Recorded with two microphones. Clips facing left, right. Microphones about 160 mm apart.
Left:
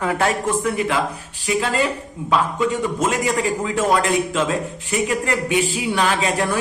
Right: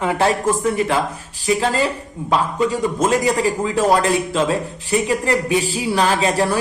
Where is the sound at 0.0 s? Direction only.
25° right (ahead or behind).